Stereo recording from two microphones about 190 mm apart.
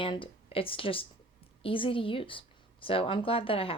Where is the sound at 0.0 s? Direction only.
25° left (ahead or behind).